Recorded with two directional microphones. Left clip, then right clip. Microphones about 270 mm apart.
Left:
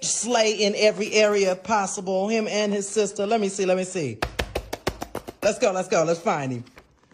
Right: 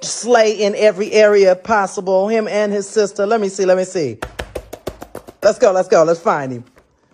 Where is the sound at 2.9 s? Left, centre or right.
Right.